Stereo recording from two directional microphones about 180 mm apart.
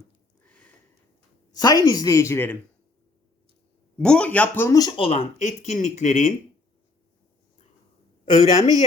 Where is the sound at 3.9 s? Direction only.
5° left (ahead or behind).